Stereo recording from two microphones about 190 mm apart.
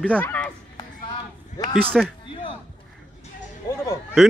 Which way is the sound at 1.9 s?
Centre (ahead or behind).